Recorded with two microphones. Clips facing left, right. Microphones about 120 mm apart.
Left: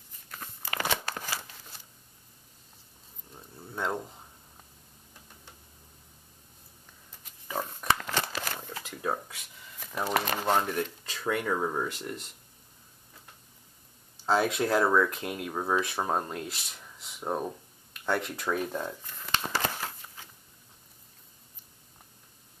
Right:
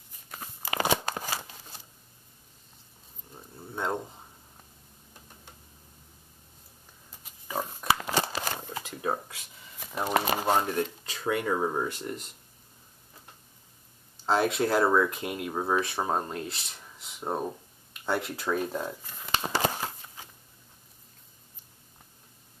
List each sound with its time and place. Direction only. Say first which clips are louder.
0.3 s a sound: right 3 dB; 15° right (ahead or behind)
3.3 s a sound: right 1 dB; centre (ahead or behind)
3.9 s speech: right 2 dB; 5° right (ahead or behind)
7.4 s pig: right 1 dB; 10° right (ahead or behind)
8.9 s a sound: right 1 dB; 10° right (ahead or behind)
10.2 s speech: right 1 dB; 10° right (ahead or behind)
11.1 s speech: even; centre (ahead or behind)
11.9 s speech: right 2 dB; centre (ahead or behind)
14.2 s speech: right 1 dB; centre (ahead or behind)
16.8 s a sound: even; 5° right (ahead or behind)
18.0 s speech: even; 5° right (ahead or behind)
19.4 s shuffling cards: right 6 dB; 20° right (ahead or behind)